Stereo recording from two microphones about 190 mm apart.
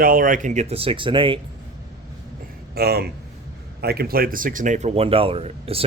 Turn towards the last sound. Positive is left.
turn(degrees=-30)  # may be behind; listen again after turning